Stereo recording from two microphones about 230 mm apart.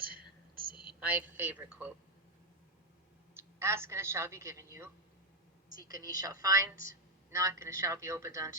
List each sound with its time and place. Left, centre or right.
0.5 s whispering: right
0.9 s a woman's voice: centre
3.3 s a woman's voice: centre
5.6 s a sound: left
6.0 s a woman's voice: left
6.2 s a woman's voice: centre